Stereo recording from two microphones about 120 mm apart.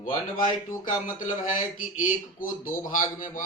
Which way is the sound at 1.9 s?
90° left.